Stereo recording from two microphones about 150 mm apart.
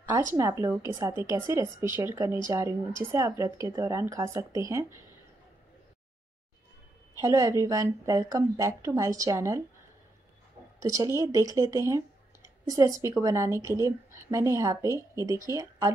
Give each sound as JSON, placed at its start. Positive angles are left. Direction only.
{"t": 0.4, "sound": "a woman's voice", "side_deg": -20}
{"t": 7.2, "sound": "a woman's voice", "side_deg": -20}
{"t": 10.8, "sound": "speech", "side_deg": -20}